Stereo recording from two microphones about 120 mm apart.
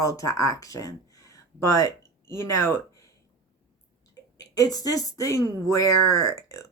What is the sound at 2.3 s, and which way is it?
Speech, 20° left (ahead or behind).